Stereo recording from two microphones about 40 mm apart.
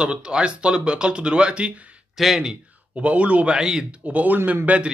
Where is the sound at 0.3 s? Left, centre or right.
Right.